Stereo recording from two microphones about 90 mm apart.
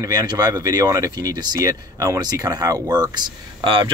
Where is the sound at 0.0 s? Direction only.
45° right (ahead or behind).